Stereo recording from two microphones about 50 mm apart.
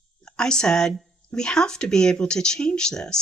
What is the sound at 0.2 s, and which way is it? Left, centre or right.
Speech, centre.